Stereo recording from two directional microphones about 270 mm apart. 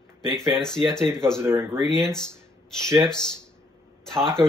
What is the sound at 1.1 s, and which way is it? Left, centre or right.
Speech, centre.